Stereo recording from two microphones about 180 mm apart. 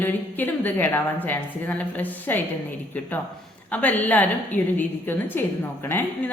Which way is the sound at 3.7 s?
10° left (ahead or behind).